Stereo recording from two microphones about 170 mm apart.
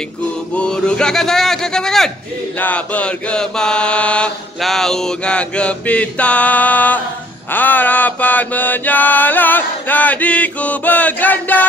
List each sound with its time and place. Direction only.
0.6 s speech: 5° left (ahead or behind)
2.6 s mantra: 10° left (ahead or behind)